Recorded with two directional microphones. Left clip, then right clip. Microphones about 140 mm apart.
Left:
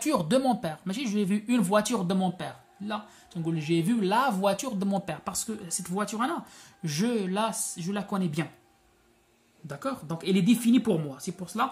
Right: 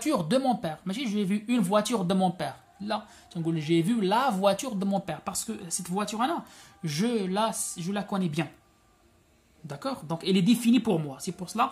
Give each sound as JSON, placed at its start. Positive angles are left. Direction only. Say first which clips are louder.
{"t": 0.0, "sound": "speech", "louder": "left 1 dB", "side_deg": 0}
{"t": 2.0, "sound": "speech", "louder": "right 3 dB", "side_deg": -25}
{"t": 9.7, "sound": "speech", "louder": "right 1 dB", "side_deg": -15}
{"t": 11.3, "sound": "speech", "louder": "right 2 dB", "side_deg": -25}